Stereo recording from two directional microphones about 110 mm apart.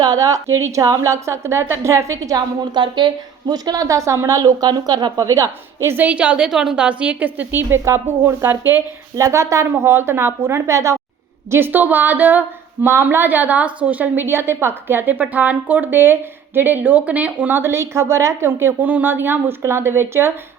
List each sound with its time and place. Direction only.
0.0 s a woman's voice: 35° right (ahead or behind)
2.7 s a woman's voice: 45° right (ahead or behind); by 20.3 s 20° right (ahead or behind)